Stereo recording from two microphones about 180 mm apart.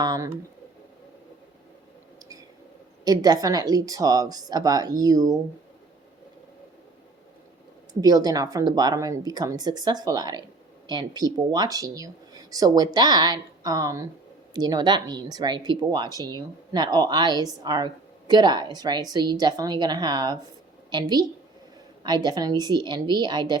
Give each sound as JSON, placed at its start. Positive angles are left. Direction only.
{"t": 0.0, "sound": "speech", "side_deg": -20}
{"t": 3.0, "sound": "speech", "side_deg": -20}
{"t": 8.0, "sound": "speech", "side_deg": -20}